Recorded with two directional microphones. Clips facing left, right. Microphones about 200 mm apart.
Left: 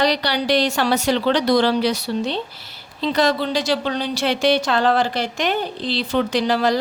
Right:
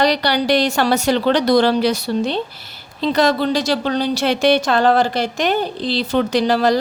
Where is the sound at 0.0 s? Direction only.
50° right (ahead or behind).